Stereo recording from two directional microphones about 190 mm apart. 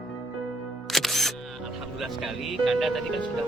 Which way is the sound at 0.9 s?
Centre (ahead or behind).